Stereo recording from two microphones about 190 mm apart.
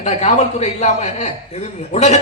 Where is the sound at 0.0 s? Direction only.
35° left (ahead or behind).